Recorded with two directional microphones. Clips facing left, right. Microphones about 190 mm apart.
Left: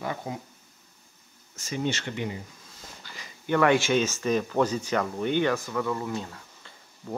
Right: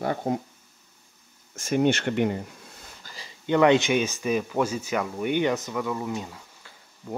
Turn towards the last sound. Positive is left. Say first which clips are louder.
# right 1 dB
turn(degrees=-10)  # may be behind; listen again after turning